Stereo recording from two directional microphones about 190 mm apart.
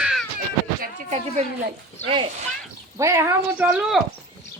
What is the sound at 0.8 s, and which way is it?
Speech, 40° right (ahead or behind).